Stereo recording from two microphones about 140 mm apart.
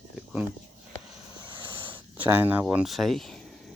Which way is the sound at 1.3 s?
35° right (ahead or behind).